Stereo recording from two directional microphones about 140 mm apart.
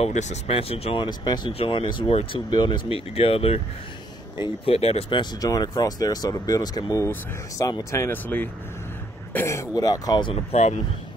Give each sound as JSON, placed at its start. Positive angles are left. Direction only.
{"t": 0.0, "sound": "speech", "side_deg": 55}
{"t": 1.0, "sound": "speech", "side_deg": 30}
{"t": 5.2, "sound": "speech", "side_deg": 25}
{"t": 10.3, "sound": "speech", "side_deg": 50}